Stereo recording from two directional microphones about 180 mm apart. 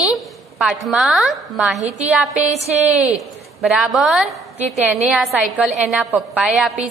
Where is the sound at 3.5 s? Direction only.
Centre (ahead or behind).